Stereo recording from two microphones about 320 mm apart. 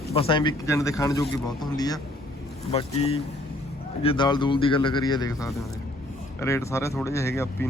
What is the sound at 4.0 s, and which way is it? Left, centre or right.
Speech, centre.